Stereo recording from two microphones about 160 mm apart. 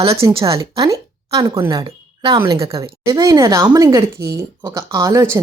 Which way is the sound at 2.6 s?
35° right (ahead or behind).